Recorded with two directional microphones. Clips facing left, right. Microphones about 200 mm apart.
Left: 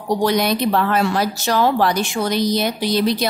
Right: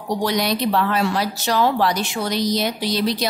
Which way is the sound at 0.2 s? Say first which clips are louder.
Left 3 dB; 50° left (ahead or behind).